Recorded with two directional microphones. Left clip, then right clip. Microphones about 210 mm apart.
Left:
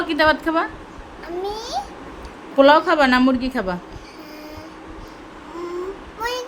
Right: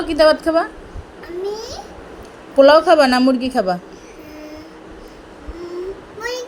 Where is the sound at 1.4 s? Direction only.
55° left (ahead or behind).